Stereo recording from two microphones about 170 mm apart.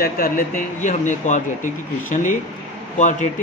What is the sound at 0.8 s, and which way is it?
Speech, 45° left (ahead or behind).